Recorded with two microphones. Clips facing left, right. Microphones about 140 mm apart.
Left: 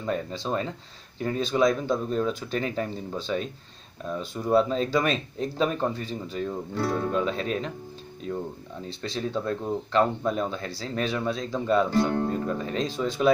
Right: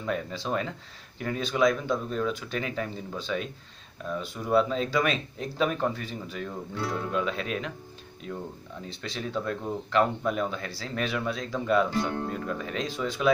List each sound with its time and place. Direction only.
0.0 s speech: 30° left (ahead or behind)
4.5 s speech: 35° left (ahead or behind)
8.8 s speech: 25° left (ahead or behind)